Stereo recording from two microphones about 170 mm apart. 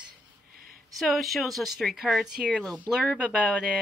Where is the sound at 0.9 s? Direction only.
Centre (ahead or behind).